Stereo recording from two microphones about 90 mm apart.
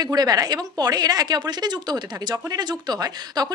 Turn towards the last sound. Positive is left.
turn(degrees=-50)  # may be behind; listen again after turning